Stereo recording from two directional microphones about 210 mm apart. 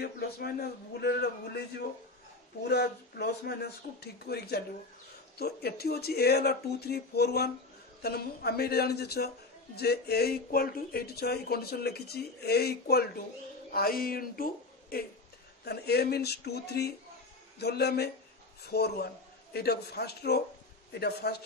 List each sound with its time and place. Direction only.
0.0 s a woman's voice: 50° left (ahead or behind)